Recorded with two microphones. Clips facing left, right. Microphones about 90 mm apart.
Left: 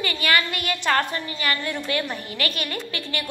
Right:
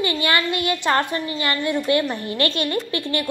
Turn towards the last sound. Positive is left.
turn(degrees=-25)  # may be behind; listen again after turning